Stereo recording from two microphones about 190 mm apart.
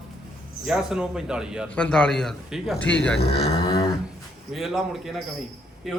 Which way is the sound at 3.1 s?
60° left (ahead or behind).